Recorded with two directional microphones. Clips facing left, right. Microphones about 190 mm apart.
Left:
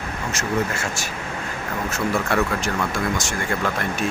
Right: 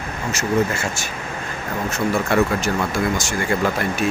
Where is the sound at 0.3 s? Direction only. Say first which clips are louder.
Right 4 dB; centre (ahead or behind).